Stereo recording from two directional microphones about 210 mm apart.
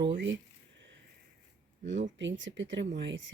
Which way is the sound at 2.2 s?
60° right (ahead or behind).